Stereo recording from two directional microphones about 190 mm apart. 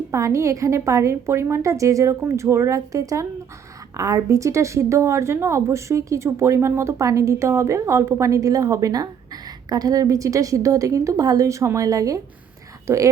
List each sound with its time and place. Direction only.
0.1 s a woman's voice: 15° right (ahead or behind)